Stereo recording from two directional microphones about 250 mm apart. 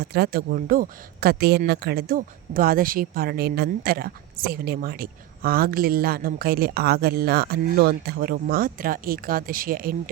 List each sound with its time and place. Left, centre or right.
0.0 s speech: right